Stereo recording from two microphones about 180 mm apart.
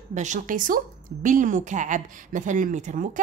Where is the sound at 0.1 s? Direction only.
40° right (ahead or behind).